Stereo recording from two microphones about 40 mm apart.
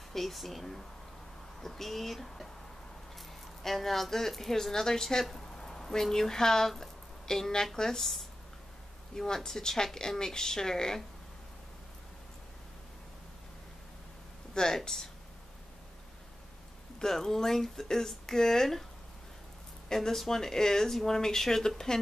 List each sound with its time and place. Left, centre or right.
0.1 s speech: centre
3.6 s speech: centre
8.0 s speech: centre
9.1 s speech: centre
14.5 s speech: centre
17.0 s speech: centre
19.9 s speech: centre